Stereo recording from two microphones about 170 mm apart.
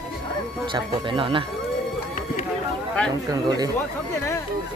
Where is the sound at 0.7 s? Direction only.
30° right (ahead or behind).